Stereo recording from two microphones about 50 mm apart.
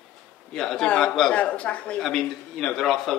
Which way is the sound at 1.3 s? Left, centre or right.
Left.